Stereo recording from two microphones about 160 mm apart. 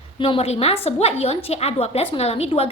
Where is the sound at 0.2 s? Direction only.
35° left (ahead or behind).